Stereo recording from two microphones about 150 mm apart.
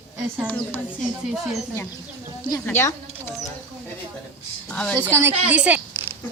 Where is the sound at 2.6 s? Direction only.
15° left (ahead or behind).